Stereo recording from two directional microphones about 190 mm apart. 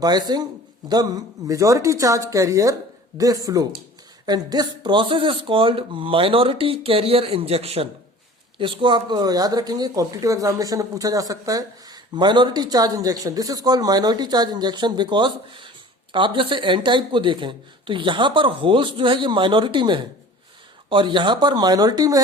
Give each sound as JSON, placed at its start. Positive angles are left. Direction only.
{"t": 0.0, "sound": "a woman's voice", "side_deg": -20}